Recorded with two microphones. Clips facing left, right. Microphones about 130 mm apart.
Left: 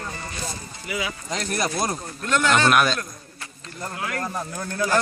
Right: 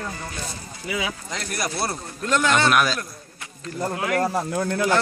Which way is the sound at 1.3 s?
20° left (ahead or behind).